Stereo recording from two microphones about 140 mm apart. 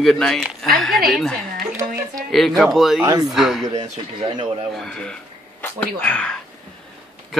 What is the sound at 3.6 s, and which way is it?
Speech, 35° right (ahead or behind).